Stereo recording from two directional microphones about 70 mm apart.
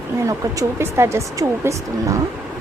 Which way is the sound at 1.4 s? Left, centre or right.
Right.